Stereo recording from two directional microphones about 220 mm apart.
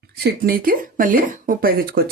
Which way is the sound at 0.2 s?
45° right (ahead or behind).